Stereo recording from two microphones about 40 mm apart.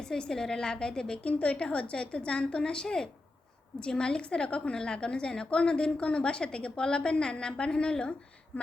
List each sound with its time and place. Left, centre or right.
0.0 s a woman's voice: centre
1.2 s a woman's voice: left
8.5 s a sound: left